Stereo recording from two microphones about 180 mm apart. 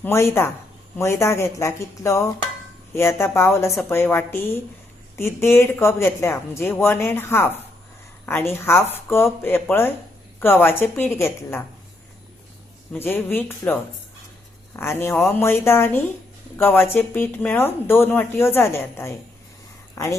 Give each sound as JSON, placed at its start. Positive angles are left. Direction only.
{"t": 0.0, "sound": "a woman's voice", "side_deg": 15}
{"t": 12.9, "sound": "a woman's voice", "side_deg": 10}
{"t": 14.8, "sound": "a woman's voice", "side_deg": 15}